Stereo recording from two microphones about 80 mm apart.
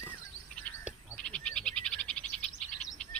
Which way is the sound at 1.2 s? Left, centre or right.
Centre.